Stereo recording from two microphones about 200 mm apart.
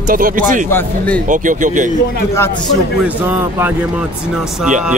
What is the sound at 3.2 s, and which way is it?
Speech, 10° right (ahead or behind).